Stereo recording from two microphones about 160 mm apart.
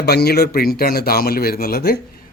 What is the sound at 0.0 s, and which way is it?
Speech, 80° left.